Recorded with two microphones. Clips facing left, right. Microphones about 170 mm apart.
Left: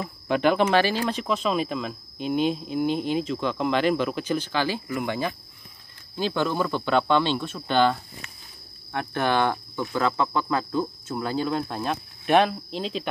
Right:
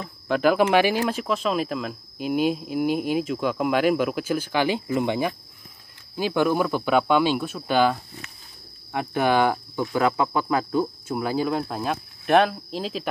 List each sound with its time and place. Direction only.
0.0 s speech: centre (ahead or behind)